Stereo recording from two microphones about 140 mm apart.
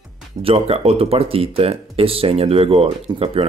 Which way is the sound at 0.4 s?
45° right (ahead or behind).